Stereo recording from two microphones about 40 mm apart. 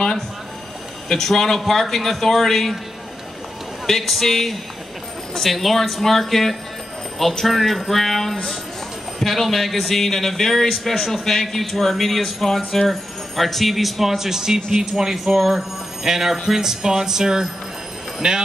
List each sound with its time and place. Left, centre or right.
1.0 s speech: centre
3.8 s speech: centre
15.3 s a sound: centre
18.2 s speech: right